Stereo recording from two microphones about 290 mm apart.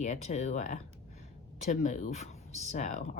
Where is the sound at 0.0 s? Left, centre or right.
Left.